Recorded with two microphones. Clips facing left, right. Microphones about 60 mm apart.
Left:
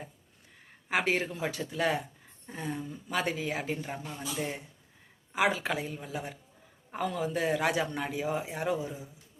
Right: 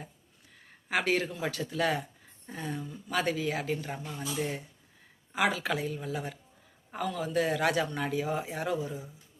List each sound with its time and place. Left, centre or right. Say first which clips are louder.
0.9 s a woman's voice: even; centre
8.7 s speech: right 1 dB; left